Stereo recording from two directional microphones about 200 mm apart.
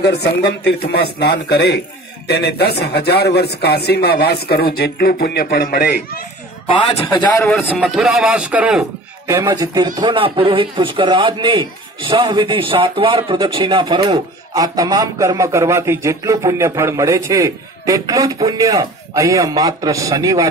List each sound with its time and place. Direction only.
0.0 s speech: 55° left (ahead or behind)
6.7 s a man's voice: 20° left (ahead or behind)
7.4 s a man's voice: 5° left (ahead or behind)
9.3 s a man's voice: 20° right (ahead or behind)